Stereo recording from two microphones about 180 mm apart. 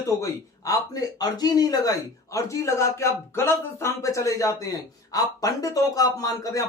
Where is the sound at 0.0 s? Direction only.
15° left (ahead or behind).